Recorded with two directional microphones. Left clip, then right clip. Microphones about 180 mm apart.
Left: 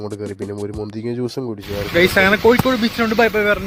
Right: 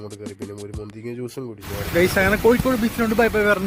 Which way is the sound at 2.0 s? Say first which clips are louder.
Left 4 dB; 10° left (ahead or behind).